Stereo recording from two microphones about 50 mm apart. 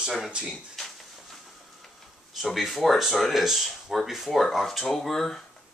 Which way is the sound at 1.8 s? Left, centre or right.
Centre.